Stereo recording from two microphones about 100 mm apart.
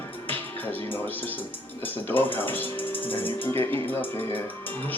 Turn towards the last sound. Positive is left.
turn(degrees=20)  # may be behind; listen again after turning